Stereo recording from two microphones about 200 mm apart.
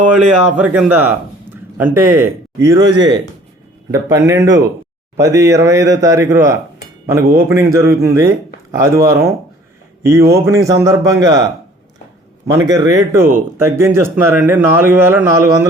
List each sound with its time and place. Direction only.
0.0 s speech: 5° right (ahead or behind)
12.5 s speech: 15° right (ahead or behind)